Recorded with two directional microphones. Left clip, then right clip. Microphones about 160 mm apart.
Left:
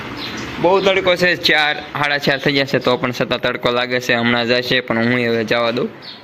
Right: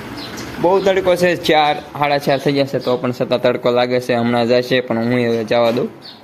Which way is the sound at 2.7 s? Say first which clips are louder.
Left 2 dB; 10° left (ahead or behind).